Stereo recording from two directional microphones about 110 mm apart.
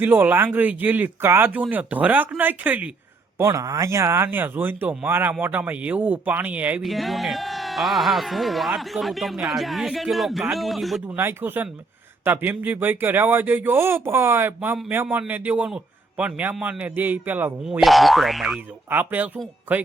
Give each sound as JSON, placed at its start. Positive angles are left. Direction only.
{"t": 0.0, "sound": "speech", "side_deg": -20}
{"t": 3.3, "sound": "speech", "side_deg": -30}
{"t": 6.8, "sound": "speech", "side_deg": 0}
{"t": 11.1, "sound": "speech", "side_deg": -20}
{"t": 17.7, "sound": "speech", "side_deg": 0}
{"t": 18.9, "sound": "speech", "side_deg": -15}